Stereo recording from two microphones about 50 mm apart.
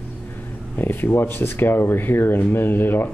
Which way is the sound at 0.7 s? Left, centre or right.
Left.